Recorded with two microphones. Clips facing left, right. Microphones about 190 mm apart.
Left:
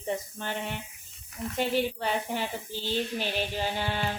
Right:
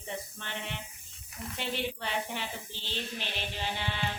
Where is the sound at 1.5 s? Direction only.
45° left (ahead or behind).